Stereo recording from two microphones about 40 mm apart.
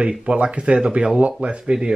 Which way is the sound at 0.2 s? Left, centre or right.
Right.